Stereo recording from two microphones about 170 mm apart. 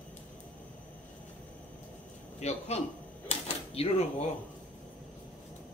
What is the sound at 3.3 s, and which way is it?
Typewriter, 35° left (ahead or behind).